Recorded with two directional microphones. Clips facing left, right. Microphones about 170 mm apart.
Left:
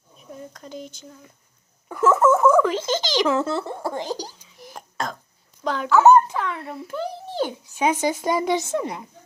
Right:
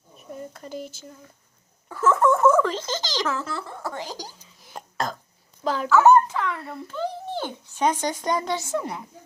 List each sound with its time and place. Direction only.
0.2 s speech: centre (ahead or behind)
2.0 s a sound: 5° left (ahead or behind)
2.6 s a child's voice: 10° left (ahead or behind)
4.8 s throat clearing: centre (ahead or behind)
5.6 s speech: 5° right (ahead or behind)
6.0 s dog: 20° left (ahead or behind)
6.7 s speech: 10° left (ahead or behind)